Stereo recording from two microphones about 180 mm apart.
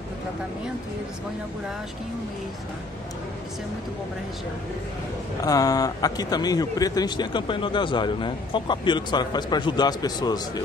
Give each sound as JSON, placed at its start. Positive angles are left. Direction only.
{"t": 5.4, "sound": "speech", "side_deg": 20}